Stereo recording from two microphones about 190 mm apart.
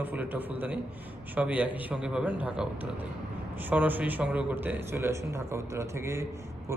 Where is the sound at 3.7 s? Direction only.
10° right (ahead or behind).